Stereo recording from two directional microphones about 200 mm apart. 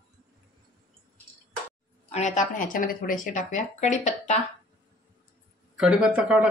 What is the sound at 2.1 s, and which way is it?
Speech, 35° left (ahead or behind).